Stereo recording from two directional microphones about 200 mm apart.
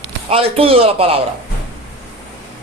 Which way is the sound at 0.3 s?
30° right (ahead or behind).